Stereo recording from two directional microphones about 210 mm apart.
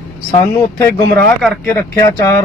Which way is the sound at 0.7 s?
15° left (ahead or behind).